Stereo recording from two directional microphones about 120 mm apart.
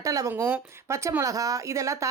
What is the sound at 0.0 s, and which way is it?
Speech, 30° right (ahead or behind).